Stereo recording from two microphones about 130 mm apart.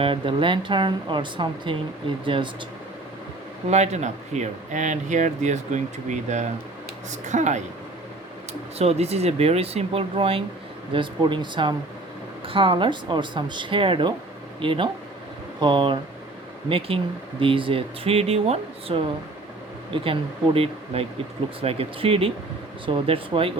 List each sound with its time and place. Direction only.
0.0 s speech: 40° right (ahead or behind)
3.7 s speech: 60° right (ahead or behind)
8.8 s speech: 50° right (ahead or behind)